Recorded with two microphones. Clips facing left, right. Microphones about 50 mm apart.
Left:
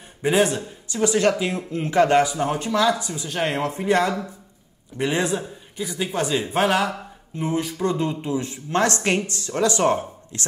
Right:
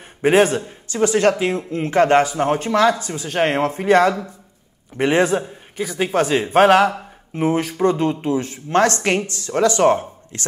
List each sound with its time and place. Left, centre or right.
0.2 s speech: right
7.7 s speech: right